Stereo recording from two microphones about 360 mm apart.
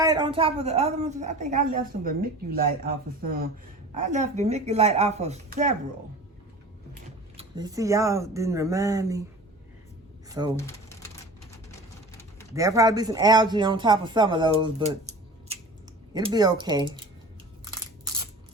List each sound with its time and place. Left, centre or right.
0.0 s speech: centre
7.3 s speech: centre
10.2 s speech: centre
12.5 s speech: centre
16.1 s speech: centre